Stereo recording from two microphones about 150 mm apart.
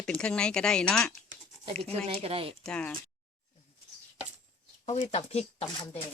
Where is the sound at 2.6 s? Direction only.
5° left (ahead or behind).